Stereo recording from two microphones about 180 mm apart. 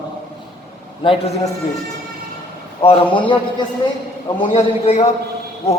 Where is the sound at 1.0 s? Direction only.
30° left (ahead or behind).